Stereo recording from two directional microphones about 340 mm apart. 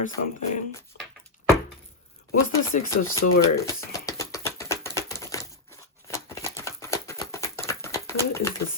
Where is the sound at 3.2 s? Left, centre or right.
Left.